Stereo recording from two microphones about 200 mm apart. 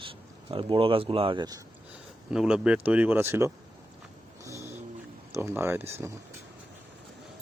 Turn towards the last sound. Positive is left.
turn(degrees=-15)  # may be behind; listen again after turning